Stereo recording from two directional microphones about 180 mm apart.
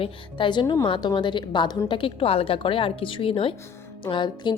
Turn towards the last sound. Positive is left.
turn(degrees=25)  # may be behind; listen again after turning